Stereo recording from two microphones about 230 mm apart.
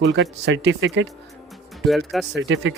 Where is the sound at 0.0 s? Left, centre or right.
Right.